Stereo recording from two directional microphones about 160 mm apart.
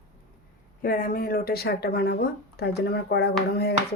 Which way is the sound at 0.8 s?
65° left (ahead or behind).